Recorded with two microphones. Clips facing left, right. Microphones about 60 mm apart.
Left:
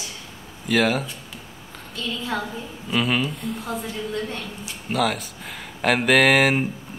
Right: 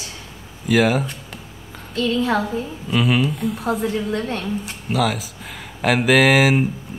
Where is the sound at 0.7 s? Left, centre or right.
Centre.